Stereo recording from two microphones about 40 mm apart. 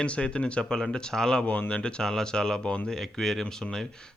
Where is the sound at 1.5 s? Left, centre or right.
Left.